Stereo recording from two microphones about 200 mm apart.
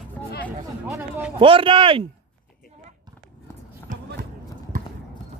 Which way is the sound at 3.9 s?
40° right (ahead or behind).